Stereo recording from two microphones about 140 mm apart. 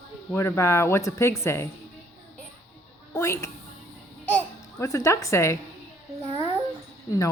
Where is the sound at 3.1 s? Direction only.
20° left (ahead or behind).